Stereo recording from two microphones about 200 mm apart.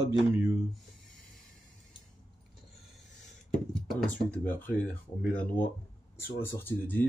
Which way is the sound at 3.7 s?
Centre (ahead or behind).